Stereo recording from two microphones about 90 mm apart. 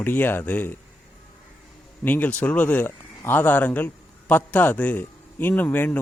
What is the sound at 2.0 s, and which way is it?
Speech, 15° left (ahead or behind).